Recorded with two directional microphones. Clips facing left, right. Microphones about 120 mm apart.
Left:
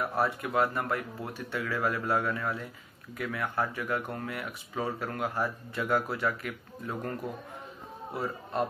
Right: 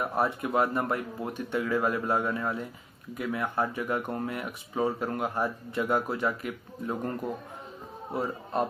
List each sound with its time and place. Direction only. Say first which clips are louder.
0.0 s speech: right 1 dB; 20° right (ahead or behind)